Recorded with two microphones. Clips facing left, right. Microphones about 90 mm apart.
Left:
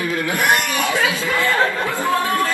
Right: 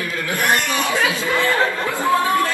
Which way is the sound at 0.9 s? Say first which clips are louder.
Even; 20° right (ahead or behind).